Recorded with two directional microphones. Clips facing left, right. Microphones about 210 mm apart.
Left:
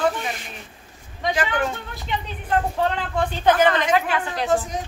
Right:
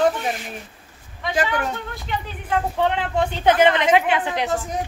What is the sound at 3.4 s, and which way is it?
A woman's voice, 20° right (ahead or behind).